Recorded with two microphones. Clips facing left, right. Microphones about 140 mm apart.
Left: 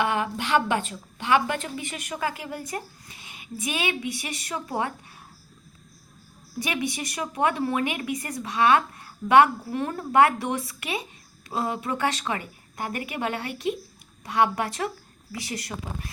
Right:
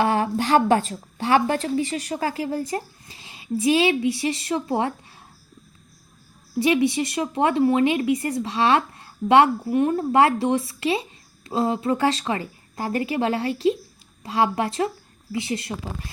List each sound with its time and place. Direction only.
0.0 s a woman's voice: 35° right (ahead or behind)
6.6 s a woman's voice: 25° right (ahead or behind)